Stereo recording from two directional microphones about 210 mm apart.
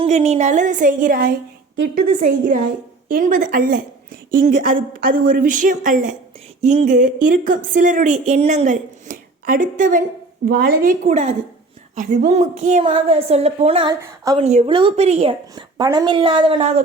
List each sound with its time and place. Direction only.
0.0 s a woman's voice: 30° right (ahead or behind)